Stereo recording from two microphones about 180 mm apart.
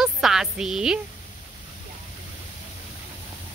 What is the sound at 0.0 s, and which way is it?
Speech, 5° right (ahead or behind).